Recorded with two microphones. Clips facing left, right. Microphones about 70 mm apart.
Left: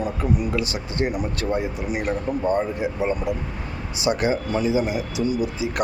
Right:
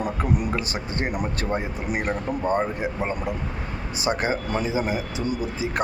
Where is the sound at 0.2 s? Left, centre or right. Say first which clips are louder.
Left 2 dB; right.